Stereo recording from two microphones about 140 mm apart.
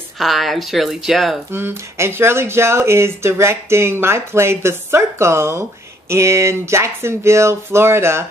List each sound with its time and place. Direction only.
0.2 s speech: centre (ahead or behind)
1.5 s speech: 15° right (ahead or behind)